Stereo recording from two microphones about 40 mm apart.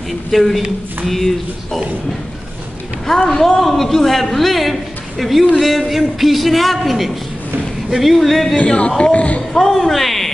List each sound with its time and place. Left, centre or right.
0.3 s a man's voice: centre
3.3 s a man's voice: centre
8.5 s speech: left
9.7 s a sound: centre